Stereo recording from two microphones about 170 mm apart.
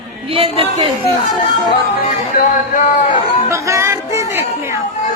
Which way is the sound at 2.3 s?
50° left (ahead or behind).